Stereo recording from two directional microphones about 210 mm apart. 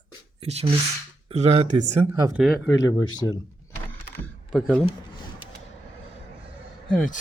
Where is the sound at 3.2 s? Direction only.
15° left (ahead or behind).